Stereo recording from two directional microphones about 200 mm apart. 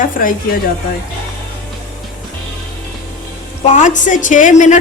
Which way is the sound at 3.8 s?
40° left (ahead or behind).